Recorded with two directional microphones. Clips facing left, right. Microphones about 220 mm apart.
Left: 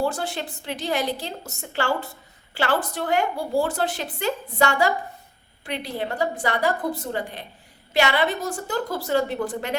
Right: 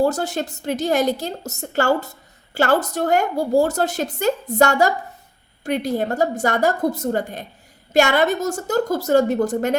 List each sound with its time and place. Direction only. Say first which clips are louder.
0.0 s a woman's voice: right 6 dB; 40° right (ahead or behind)